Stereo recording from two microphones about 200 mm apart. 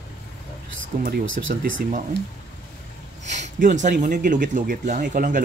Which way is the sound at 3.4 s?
40° right (ahead or behind).